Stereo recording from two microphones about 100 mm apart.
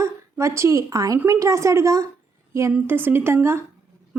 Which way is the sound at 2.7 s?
20° right (ahead or behind).